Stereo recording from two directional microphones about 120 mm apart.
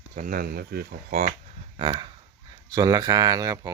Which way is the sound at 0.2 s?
90° right.